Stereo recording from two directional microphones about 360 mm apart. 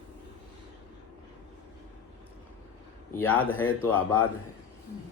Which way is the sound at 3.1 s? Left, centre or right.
Centre.